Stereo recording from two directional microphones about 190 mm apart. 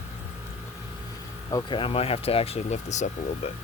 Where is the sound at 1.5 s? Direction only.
25° left (ahead or behind).